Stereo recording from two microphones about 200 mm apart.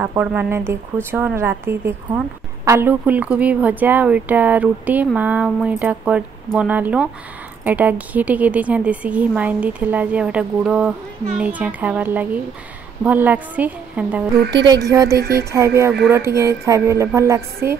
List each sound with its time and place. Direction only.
0.0 s a woman's voice: 5° right (ahead or behind)
15.1 s a sound: 50° right (ahead or behind)
15.5 s a woman's voice: 15° right (ahead or behind)